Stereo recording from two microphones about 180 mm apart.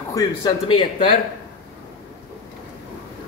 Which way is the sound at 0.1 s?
20° left (ahead or behind).